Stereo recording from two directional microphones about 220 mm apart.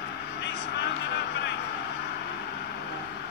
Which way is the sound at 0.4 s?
50° left (ahead or behind).